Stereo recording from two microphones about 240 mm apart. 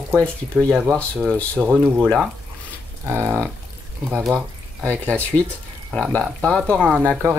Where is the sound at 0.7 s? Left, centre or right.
Centre.